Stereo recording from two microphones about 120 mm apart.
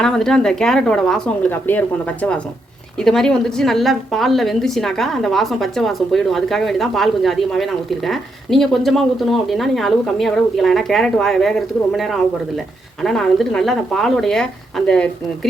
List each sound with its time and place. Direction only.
0.0 s a woman's voice: 5° left (ahead or behind)
1.5 s a woman's voice: 15° left (ahead or behind)